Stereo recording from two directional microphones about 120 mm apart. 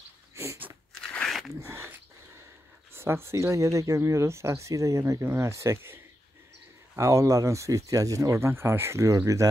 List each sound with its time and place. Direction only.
0.4 s biting: 20° right (ahead or behind)
0.9 s crunch: 5° left (ahead or behind)
1.6 s a sound: 20° right (ahead or behind)
2.9 s speech: 20° right (ahead or behind)
7.0 s speech: 25° right (ahead or behind)